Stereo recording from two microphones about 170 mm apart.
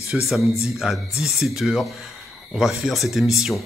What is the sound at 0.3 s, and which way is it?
Speech, centre (ahead or behind).